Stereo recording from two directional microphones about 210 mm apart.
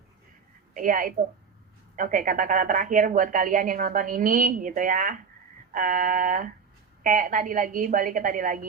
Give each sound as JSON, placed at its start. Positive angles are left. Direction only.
{"t": 0.7, "sound": "a woman's voice", "side_deg": -40}